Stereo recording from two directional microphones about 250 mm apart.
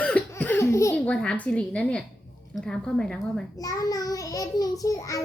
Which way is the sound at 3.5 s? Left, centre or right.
Centre.